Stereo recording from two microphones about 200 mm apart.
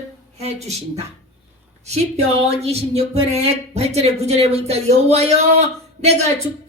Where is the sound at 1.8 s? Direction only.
35° right (ahead or behind).